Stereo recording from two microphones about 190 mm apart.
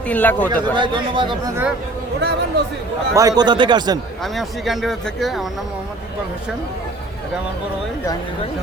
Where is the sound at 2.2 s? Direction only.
60° right (ahead or behind).